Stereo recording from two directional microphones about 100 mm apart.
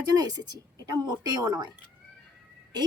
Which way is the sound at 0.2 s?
40° right (ahead or behind).